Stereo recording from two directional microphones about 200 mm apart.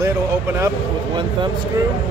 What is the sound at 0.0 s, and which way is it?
Speech, 15° right (ahead or behind).